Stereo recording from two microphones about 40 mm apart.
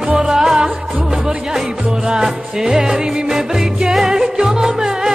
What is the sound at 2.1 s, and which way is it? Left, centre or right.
Music, centre.